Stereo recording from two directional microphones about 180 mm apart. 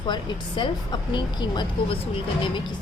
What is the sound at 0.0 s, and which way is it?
A woman's voice, 25° left (ahead or behind).